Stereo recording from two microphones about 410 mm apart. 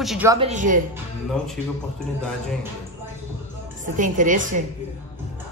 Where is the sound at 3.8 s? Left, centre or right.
Centre.